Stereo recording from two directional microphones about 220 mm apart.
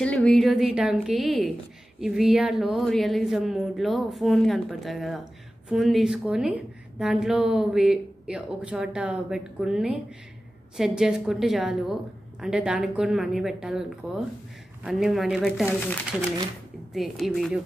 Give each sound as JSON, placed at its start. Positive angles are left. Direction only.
{"t": 0.0, "sound": "a woman's voice", "side_deg": 5}